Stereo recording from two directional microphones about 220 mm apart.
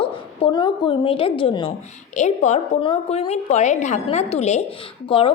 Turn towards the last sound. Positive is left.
turn(degrees=25)  # may be behind; listen again after turning